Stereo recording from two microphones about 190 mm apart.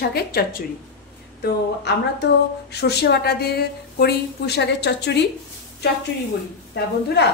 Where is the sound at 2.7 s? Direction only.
60° left (ahead or behind).